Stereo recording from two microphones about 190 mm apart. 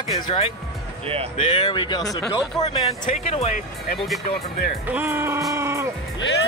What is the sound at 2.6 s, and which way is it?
Speech, 30° left (ahead or behind).